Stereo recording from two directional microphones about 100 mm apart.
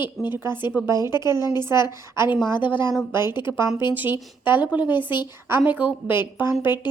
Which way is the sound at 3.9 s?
20° right (ahead or behind).